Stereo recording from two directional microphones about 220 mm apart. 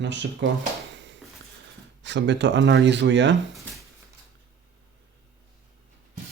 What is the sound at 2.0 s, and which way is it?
Speech, 55° right (ahead or behind).